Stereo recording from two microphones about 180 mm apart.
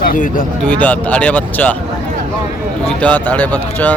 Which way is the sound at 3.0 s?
10° left (ahead or behind).